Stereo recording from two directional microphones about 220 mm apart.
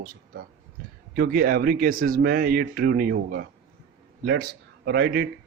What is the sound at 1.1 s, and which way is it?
A man's voice, 40° right (ahead or behind).